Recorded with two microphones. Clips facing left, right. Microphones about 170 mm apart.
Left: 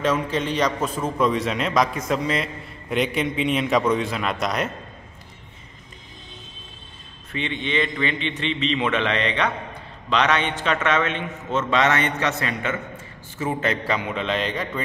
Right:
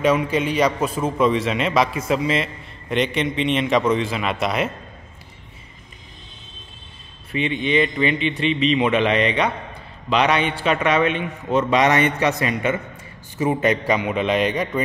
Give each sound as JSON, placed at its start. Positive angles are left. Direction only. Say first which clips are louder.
{"t": 0.0, "sound": "a man's voice", "louder": "right 4 dB", "side_deg": -10}
{"t": 7.3, "sound": "a man's voice", "louder": "right 5 dB", "side_deg": -10}